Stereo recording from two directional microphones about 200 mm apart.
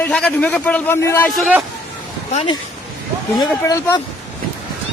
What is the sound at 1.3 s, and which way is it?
Speech, centre (ahead or behind).